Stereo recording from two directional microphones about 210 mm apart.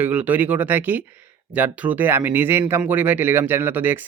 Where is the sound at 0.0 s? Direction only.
5° right (ahead or behind).